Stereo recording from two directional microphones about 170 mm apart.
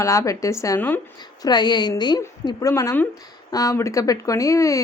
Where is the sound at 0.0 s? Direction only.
20° left (ahead or behind).